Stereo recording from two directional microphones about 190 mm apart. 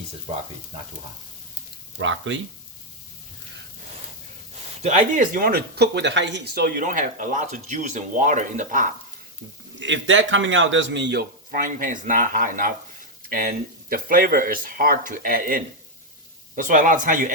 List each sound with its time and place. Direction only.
2.0 s speech: 85° right
4.8 s speech: 40° right (ahead or behind)
9.7 s a man's voice: 75° right (ahead or behind)
11.5 s speech: 45° right (ahead or behind)